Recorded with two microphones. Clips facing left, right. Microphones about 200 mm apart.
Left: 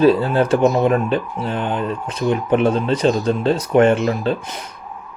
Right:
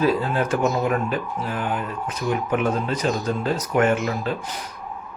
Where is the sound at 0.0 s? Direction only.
30° left (ahead or behind).